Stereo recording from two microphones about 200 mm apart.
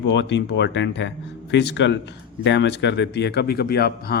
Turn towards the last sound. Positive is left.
turn(degrees=50)  # may be behind; listen again after turning